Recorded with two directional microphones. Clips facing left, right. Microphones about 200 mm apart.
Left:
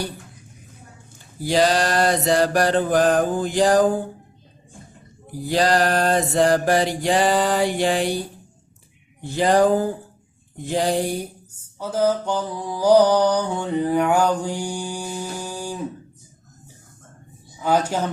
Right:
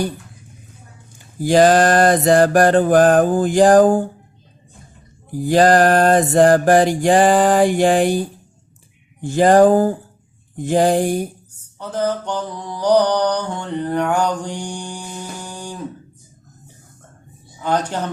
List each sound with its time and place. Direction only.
1.4 s mantra: 50° right (ahead or behind)
5.4 s mantra: 50° right (ahead or behind)
9.2 s mantra: 50° right (ahead or behind)
11.8 s mantra: 5° left (ahead or behind)
17.6 s mantra: 10° left (ahead or behind)